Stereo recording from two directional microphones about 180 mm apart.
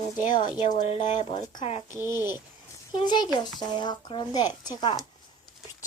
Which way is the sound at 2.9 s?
25° left (ahead or behind).